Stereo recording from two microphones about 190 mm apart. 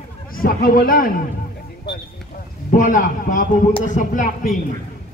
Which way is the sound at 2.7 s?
45° left (ahead or behind).